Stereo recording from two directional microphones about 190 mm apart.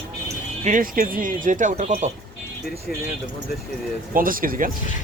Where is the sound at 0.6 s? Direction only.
45° right (ahead or behind).